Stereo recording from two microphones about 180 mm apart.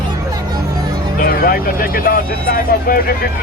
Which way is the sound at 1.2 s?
55° left (ahead or behind).